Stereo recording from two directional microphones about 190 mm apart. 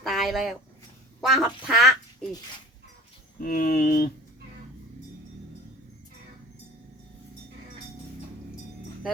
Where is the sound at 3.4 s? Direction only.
50° left (ahead or behind).